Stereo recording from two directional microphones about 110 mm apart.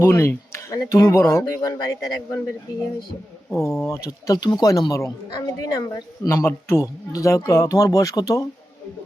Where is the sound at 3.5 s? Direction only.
25° left (ahead or behind).